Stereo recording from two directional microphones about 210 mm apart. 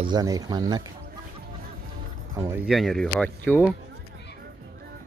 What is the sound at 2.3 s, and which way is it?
Speech, 15° right (ahead or behind).